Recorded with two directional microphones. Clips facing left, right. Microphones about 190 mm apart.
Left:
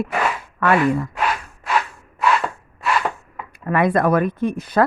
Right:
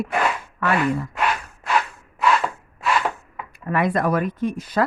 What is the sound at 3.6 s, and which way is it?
Speech, 55° left (ahead or behind).